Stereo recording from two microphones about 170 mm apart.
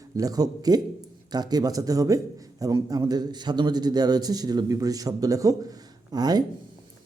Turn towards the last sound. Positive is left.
turn(degrees=-25)  # may be behind; listen again after turning